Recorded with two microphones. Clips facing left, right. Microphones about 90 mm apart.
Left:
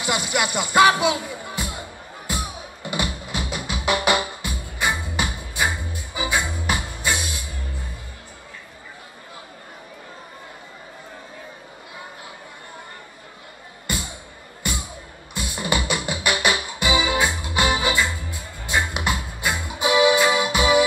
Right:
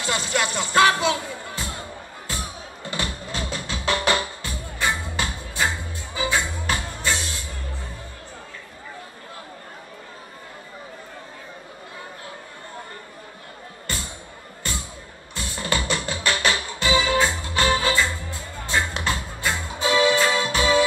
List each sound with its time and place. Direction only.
0.0 s music: 15° left (ahead or behind)
13.9 s music: 15° left (ahead or behind)